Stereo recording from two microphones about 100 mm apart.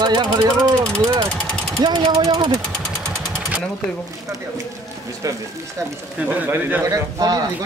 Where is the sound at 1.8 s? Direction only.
50° right (ahead or behind).